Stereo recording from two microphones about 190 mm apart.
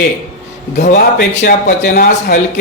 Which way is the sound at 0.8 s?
60° left (ahead or behind).